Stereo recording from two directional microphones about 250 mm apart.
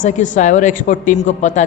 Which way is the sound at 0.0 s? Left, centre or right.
Left.